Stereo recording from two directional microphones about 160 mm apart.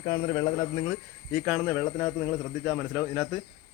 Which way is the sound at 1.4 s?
5° left (ahead or behind).